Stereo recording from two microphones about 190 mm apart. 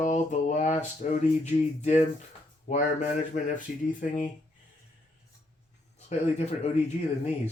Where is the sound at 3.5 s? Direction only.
45° left (ahead or behind).